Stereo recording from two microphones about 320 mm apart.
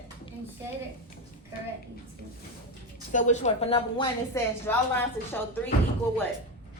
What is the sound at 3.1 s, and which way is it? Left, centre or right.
A woman's voice, left.